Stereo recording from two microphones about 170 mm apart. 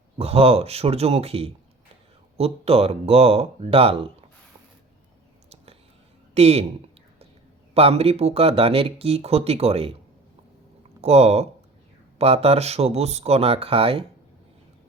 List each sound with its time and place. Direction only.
0.2 s speech: 35° right (ahead or behind)
6.3 s speech: 40° right (ahead or behind)
7.7 s speech: 35° right (ahead or behind)
11.0 s speech: 40° right (ahead or behind)